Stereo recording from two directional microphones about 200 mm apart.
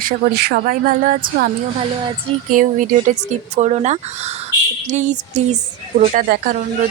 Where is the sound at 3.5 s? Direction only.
35° right (ahead or behind).